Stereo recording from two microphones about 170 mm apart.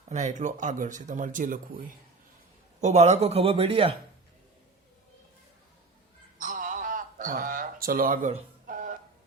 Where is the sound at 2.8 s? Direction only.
40° right (ahead or behind).